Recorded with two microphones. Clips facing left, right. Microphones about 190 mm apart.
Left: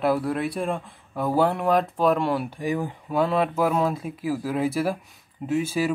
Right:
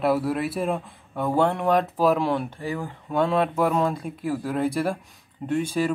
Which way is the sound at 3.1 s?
Centre (ahead or behind).